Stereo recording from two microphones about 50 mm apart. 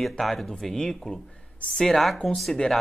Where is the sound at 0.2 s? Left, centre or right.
Centre.